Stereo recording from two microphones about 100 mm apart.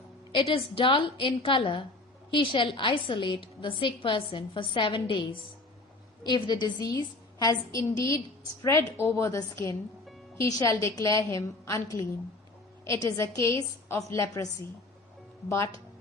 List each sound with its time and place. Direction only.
0.3 s a woman's voice: 65° left (ahead or behind)
6.2 s a woman's voice: 45° left (ahead or behind); by 14.4 s 30° left (ahead or behind)
15.4 s a woman's voice: 30° left (ahead or behind)